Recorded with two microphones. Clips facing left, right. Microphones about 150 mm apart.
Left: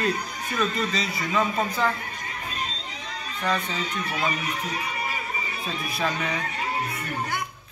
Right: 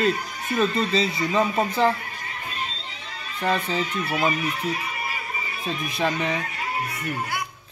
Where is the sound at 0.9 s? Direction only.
25° right (ahead or behind).